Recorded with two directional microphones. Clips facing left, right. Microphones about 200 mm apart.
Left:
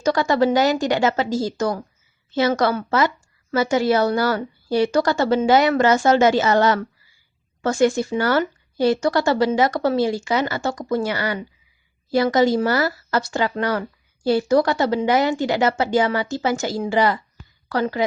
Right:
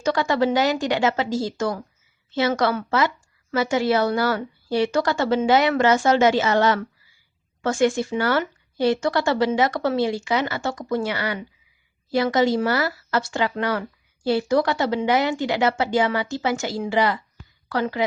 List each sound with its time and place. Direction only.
0.0 s a woman's voice: 40° left (ahead or behind)